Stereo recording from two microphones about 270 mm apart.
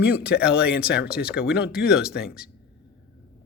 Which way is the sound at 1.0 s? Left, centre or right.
Centre.